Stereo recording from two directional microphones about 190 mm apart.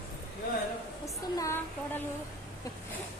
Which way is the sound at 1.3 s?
15° left (ahead or behind).